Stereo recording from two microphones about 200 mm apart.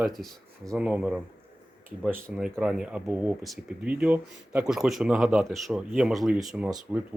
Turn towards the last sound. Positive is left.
turn(degrees=-5)  # may be behind; listen again after turning